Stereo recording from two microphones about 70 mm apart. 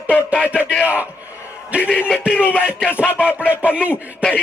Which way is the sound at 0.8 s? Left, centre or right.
Right.